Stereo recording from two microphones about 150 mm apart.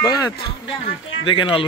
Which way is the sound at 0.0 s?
25° left (ahead or behind).